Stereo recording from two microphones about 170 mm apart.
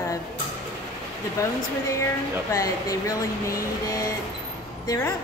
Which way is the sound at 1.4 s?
15° left (ahead or behind).